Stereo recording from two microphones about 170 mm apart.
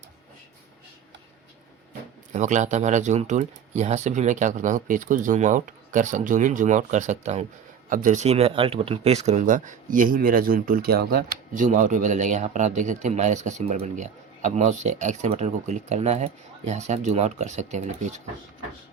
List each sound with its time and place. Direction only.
2.3 s speech: 45° right (ahead or behind)